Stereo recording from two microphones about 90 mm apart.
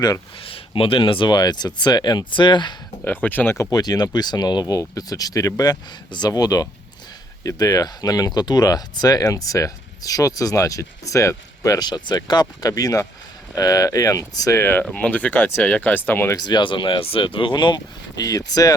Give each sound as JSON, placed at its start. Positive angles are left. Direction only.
{"t": 0.3, "sound": "speech", "side_deg": 90}
{"t": 1.4, "sound": "speech", "side_deg": 50}
{"t": 3.0, "sound": "speech", "side_deg": 20}
{"t": 3.6, "sound": "speech", "side_deg": 45}
{"t": 6.1, "sound": "speech", "side_deg": 50}
{"t": 11.9, "sound": "speech", "side_deg": 55}
{"t": 14.6, "sound": "speech", "side_deg": 25}
{"t": 16.3, "sound": "speech", "side_deg": 55}